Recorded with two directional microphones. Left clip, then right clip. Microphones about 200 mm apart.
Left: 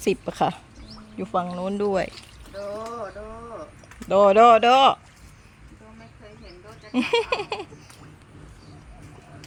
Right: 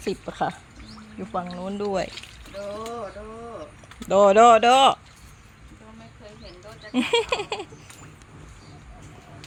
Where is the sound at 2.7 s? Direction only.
25° right (ahead or behind).